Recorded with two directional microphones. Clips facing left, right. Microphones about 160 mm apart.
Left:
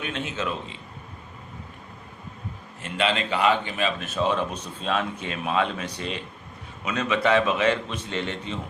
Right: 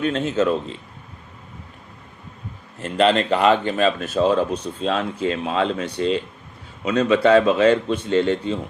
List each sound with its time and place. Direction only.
0.0 s speech: 40° right (ahead or behind)
2.8 s speech: 40° right (ahead or behind)